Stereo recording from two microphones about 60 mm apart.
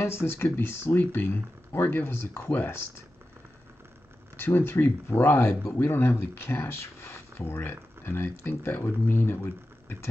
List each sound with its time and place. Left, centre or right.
0.0 s speech: left
4.4 s speech: left